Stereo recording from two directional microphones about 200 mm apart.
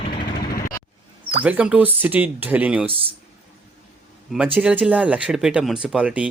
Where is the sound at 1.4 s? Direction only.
5° right (ahead or behind).